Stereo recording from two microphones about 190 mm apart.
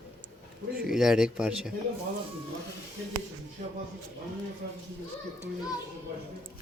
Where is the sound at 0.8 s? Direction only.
Centre (ahead or behind).